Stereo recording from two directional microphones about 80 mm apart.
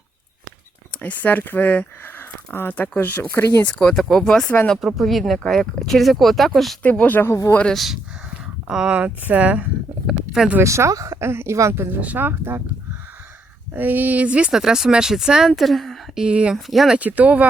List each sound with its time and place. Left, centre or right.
1.0 s speech: left
3.7 s speech: centre
4.8 s speech: centre
6.8 s speech: centre
7.6 s speech: centre
8.6 s speech: centre
10.1 s a sound: centre
10.6 s speech: right
13.7 s speech: right; by 16.2 s centre
16.2 s speech: centre
16.6 s speech: centre
17.0 s speech: centre